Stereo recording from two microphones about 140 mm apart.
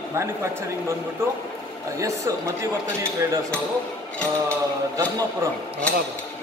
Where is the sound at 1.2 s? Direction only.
20° right (ahead or behind).